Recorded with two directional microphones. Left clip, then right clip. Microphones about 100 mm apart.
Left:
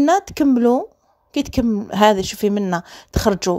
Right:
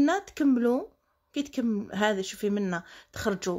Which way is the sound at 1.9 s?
50° left (ahead or behind).